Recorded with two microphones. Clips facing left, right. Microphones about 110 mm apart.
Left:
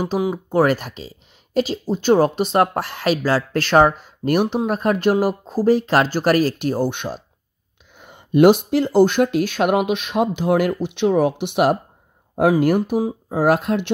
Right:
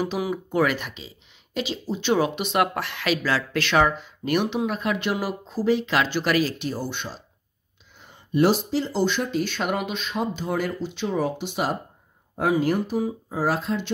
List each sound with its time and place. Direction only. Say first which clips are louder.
0.2 s speech: left 5 dB; 25° left (ahead or behind)
0.6 s speech: left 6 dB; 40° left (ahead or behind)
9.6 s speech: left 8 dB; 65° left (ahead or behind)